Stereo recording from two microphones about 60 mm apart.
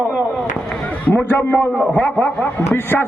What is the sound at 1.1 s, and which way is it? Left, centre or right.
Speech, left.